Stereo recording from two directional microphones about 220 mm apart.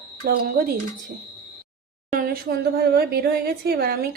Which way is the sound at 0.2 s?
45° right (ahead or behind).